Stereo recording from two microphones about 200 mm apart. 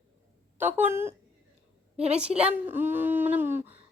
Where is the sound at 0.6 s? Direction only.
10° right (ahead or behind).